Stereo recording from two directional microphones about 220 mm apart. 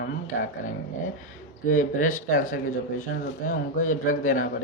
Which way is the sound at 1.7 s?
35° left (ahead or behind).